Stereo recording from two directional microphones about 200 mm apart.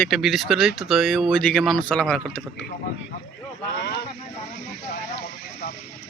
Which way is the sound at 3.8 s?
60° left (ahead or behind).